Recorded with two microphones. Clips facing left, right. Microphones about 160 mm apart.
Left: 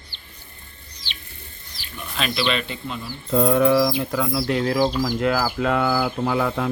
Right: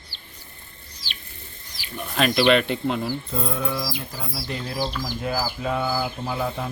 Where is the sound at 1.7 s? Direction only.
15° right (ahead or behind).